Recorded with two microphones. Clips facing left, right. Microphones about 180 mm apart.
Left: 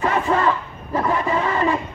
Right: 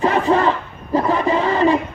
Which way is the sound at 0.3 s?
25° right (ahead or behind).